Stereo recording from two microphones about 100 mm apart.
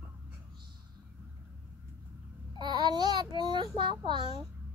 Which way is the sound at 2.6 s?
45° right (ahead or behind).